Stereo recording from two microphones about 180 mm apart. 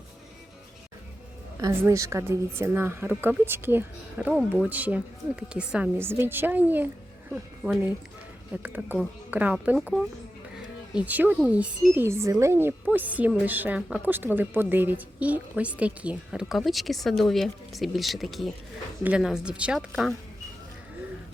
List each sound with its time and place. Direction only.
1.5 s a woman's voice: 15° right (ahead or behind)
4.4 s a woman's voice: centre (ahead or behind)
7.6 s speech: 5° left (ahead or behind)
8.6 s a woman's voice: 10° right (ahead or behind)